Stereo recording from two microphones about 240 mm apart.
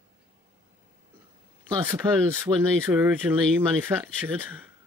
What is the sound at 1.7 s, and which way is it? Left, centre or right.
Speech, centre.